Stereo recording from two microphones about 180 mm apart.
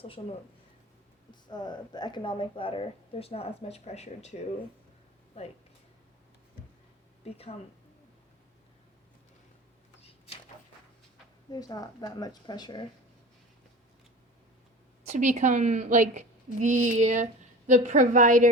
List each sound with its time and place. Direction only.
0.0 s speech: 30° left (ahead or behind)
7.3 s speech: 35° left (ahead or behind)
10.0 s a sound: 35° left (ahead or behind)
11.5 s speech: 20° left (ahead or behind)
15.0 s a woman's voice: 40° right (ahead or behind)